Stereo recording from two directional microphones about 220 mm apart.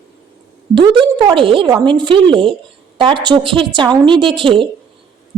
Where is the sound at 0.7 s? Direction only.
20° right (ahead or behind).